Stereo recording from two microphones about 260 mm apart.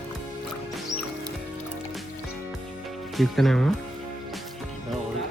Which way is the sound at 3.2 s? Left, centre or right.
Centre.